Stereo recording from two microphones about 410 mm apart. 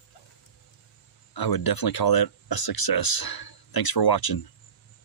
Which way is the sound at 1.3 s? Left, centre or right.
Left.